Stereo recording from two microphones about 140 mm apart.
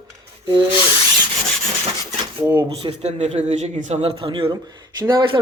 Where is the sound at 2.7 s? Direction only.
50° right (ahead or behind); by 5.3 s 30° right (ahead or behind).